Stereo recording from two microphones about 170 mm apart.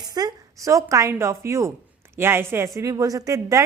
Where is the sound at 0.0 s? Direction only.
25° right (ahead or behind).